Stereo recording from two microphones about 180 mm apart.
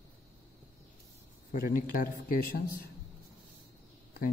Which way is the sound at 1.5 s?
50° left (ahead or behind).